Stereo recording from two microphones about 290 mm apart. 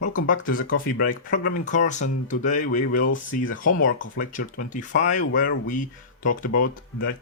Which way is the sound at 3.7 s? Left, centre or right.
Left.